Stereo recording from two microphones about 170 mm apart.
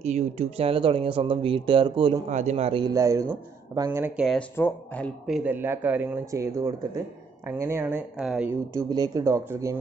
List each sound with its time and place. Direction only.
0.0 s speech: 40° right (ahead or behind)
2.2 s speech: 40° right (ahead or behind)
2.9 s speech: 20° right (ahead or behind)
4.2 s speech: centre (ahead or behind)
4.6 s speech: 10° left (ahead or behind)
5.2 s speech: 5° right (ahead or behind)
8.7 s speech: 20° right (ahead or behind)